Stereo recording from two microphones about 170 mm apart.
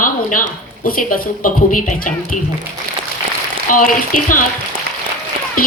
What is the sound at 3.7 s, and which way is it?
Speech, 50° left (ahead or behind).